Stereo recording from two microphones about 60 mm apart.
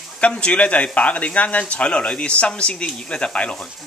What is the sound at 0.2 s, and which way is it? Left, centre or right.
Speech, centre.